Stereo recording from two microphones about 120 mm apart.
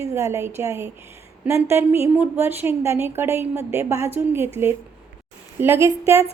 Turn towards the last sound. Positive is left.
turn(degrees=-20)  # may be behind; listen again after turning